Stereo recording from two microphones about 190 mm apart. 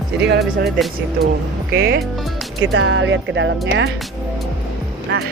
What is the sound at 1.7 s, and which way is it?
Speech, 55° right (ahead or behind).